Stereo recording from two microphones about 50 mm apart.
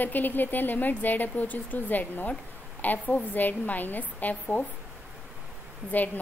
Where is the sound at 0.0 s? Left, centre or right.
Left.